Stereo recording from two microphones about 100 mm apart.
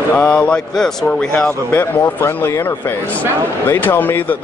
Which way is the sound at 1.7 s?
25° left (ahead or behind).